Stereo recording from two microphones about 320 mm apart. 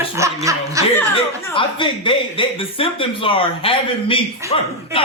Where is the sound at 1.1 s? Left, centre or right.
Centre.